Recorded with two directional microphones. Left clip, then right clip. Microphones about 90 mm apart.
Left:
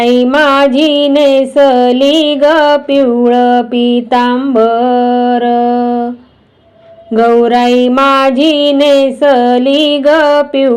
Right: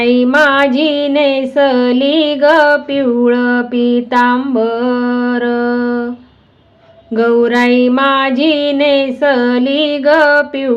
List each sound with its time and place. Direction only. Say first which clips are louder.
0.0 s music: left 2 dB; 30° left (ahead or behind)
0.6 s mantra: left 4 dB; 30° left (ahead or behind)
7.1 s mantra: left 4 dB; 25° left (ahead or behind)